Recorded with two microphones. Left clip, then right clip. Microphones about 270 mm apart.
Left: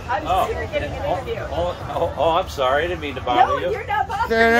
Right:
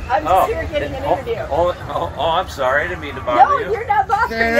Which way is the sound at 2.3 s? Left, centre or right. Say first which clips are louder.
Right 3 dB; left.